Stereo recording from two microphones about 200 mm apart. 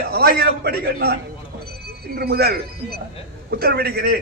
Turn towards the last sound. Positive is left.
turn(degrees=-50)  # may be behind; listen again after turning